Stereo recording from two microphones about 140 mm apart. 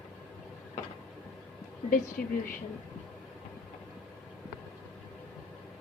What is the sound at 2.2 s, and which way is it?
Speech, 90° left.